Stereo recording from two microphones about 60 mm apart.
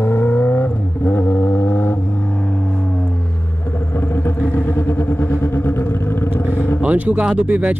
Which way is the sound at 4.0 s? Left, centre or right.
Left.